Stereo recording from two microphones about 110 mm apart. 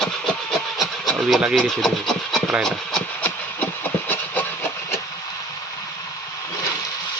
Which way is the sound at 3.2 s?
15° left (ahead or behind).